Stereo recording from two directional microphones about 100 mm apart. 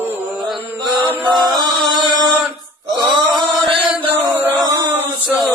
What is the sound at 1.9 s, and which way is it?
Mantra, 50° right (ahead or behind).